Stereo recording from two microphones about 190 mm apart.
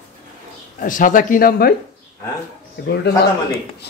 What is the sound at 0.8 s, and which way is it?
Speech, 45° left (ahead or behind).